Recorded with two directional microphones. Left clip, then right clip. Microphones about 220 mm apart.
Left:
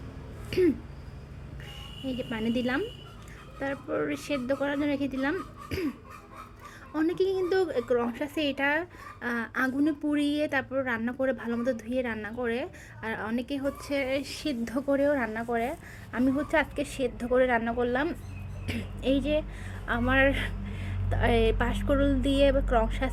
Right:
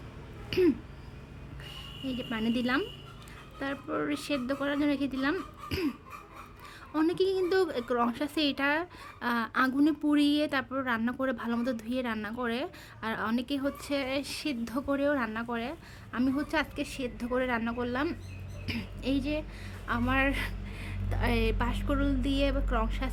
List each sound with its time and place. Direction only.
2.0 s a woman's voice: 10° right (ahead or behind)
6.9 s a woman's voice: 10° right (ahead or behind)
7.2 s speech: 45° right (ahead or behind)
7.5 s a woman's voice: 15° right (ahead or behind)